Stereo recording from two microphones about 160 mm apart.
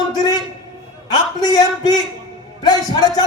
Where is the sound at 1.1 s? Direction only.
25° left (ahead or behind).